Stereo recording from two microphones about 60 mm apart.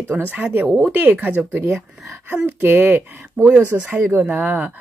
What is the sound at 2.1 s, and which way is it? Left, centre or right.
Speech, right.